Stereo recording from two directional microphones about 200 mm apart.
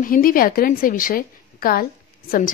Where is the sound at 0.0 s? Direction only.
45° left (ahead or behind).